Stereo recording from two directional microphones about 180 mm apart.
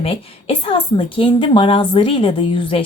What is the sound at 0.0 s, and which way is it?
A woman's voice, 30° left (ahead or behind).